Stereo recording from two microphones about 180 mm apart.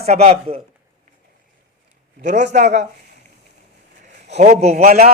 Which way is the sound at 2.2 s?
40° right (ahead or behind).